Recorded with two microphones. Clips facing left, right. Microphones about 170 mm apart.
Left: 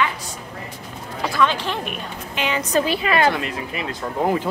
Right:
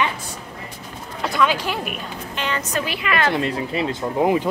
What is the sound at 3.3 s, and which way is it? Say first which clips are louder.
Speech: right 5 dB; 30° right (ahead or behind).